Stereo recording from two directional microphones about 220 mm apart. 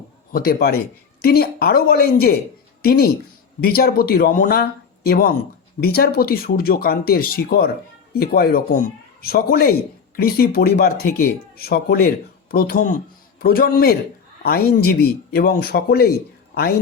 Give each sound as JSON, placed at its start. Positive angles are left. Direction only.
{"t": 0.3, "sound": "speech", "side_deg": 45}